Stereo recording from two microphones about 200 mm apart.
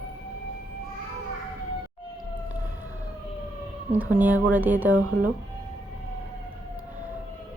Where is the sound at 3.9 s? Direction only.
10° right (ahead or behind).